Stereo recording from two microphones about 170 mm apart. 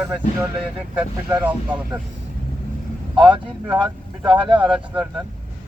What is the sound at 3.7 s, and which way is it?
Speech, 15° right (ahead or behind).